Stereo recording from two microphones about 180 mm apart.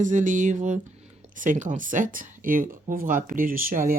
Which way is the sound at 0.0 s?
45° right (ahead or behind).